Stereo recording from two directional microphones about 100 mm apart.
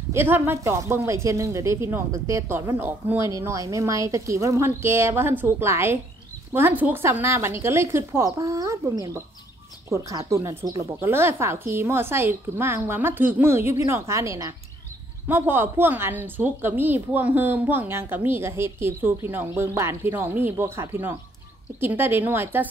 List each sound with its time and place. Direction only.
0.1 s a woman's voice: 20° right (ahead or behind)
3.3 s a woman's voice: 35° right (ahead or behind)
15.2 s a woman's voice: 20° right (ahead or behind)